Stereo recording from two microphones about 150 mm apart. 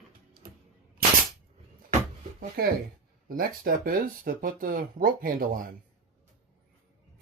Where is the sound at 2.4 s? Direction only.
90° right.